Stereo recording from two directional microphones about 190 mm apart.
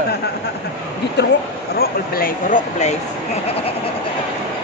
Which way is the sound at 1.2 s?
60° left (ahead or behind).